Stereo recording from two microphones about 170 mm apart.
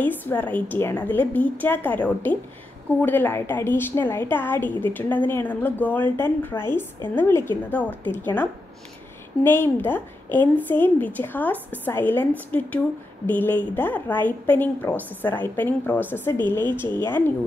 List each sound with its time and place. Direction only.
0.0 s a woman's voice: 10° left (ahead or behind)